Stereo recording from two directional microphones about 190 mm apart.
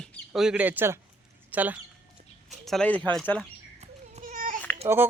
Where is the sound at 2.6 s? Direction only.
5° left (ahead or behind).